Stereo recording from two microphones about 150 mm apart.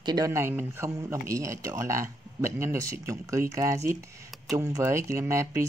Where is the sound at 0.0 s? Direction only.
25° right (ahead or behind).